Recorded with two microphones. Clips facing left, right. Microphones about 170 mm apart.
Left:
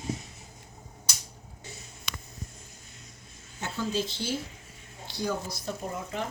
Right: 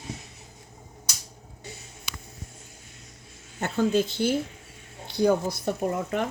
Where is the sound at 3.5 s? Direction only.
55° right (ahead or behind).